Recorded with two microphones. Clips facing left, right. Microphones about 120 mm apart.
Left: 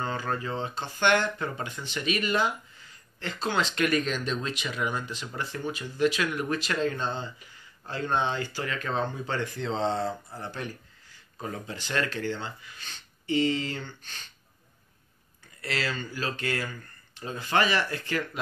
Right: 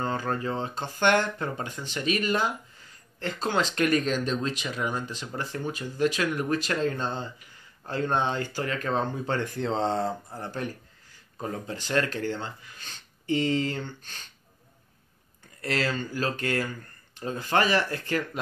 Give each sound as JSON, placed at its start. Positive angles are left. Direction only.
{"t": 0.0, "sound": "speech", "side_deg": -40}
{"t": 15.6, "sound": "speech", "side_deg": -45}